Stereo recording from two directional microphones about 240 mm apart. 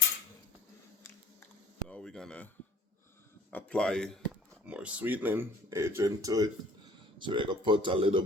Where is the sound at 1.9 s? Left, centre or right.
Centre.